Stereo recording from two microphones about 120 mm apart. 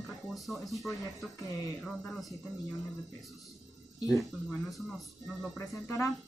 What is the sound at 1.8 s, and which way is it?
Speech, centre (ahead or behind).